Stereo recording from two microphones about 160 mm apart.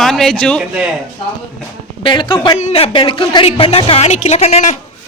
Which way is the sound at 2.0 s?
30° left (ahead or behind).